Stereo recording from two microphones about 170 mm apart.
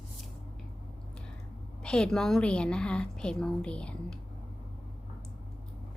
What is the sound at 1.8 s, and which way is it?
A woman's voice, 5° left (ahead or behind).